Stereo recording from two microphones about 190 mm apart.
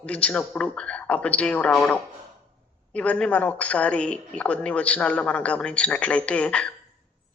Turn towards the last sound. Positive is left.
turn(degrees=5)  # may be behind; listen again after turning